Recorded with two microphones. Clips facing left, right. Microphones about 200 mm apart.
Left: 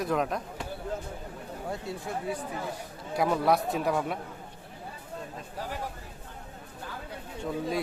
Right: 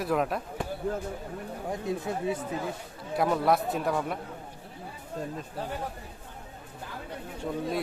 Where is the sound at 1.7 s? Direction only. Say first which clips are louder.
Right 4 dB; 20° right (ahead or behind).